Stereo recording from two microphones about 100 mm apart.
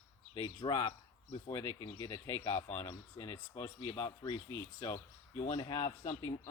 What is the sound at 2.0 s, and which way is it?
Speech, 35° left (ahead or behind).